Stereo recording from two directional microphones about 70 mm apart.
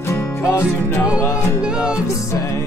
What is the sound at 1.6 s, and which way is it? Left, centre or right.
Music, centre.